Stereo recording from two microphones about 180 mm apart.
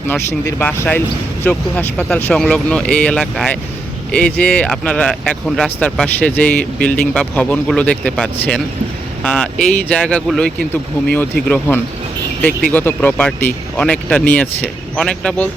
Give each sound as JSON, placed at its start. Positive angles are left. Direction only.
{"t": 0.1, "sound": "speech", "side_deg": 10}